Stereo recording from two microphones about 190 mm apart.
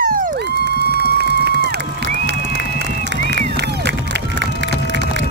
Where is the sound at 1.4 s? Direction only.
60° right (ahead or behind).